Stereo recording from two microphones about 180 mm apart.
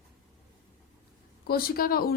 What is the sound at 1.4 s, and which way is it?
Speech, 55° left (ahead or behind).